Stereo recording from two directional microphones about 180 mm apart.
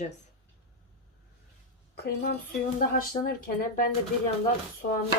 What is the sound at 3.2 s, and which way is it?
Speech, 25° left (ahead or behind).